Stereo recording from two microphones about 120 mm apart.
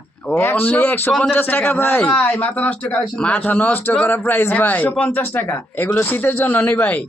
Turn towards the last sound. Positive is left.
turn(degrees=15)  # may be behind; listen again after turning